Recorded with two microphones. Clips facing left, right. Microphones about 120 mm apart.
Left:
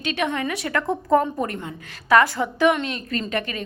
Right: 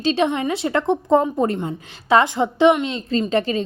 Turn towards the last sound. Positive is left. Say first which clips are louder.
# right 7 dB
turn(degrees=-30)  # may be behind; listen again after turning